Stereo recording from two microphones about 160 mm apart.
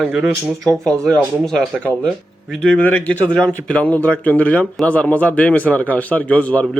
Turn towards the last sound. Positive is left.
turn(degrees=10)  # may be behind; listen again after turning